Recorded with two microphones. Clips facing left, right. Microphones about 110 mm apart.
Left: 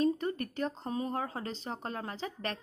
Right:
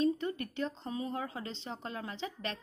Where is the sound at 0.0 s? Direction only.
40° left (ahead or behind).